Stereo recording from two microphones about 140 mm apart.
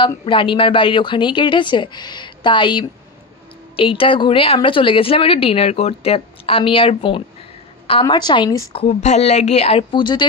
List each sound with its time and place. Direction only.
0.2 s a woman's voice: 35° left (ahead or behind)
8.7 s speech: 50° left (ahead or behind); by 10.2 s 35° left (ahead or behind)